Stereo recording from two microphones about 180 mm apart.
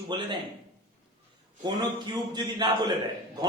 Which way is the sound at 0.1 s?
25° right (ahead or behind).